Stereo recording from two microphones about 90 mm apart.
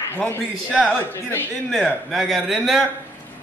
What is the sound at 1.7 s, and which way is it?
A man's voice, centre (ahead or behind).